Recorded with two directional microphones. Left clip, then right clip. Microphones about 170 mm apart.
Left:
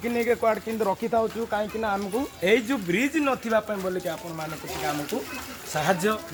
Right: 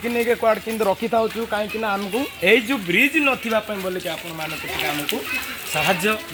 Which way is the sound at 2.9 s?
Centre (ahead or behind).